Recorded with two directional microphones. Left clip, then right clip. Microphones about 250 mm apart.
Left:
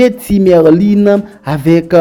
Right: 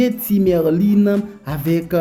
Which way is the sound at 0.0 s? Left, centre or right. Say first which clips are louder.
Left 8 dB; left.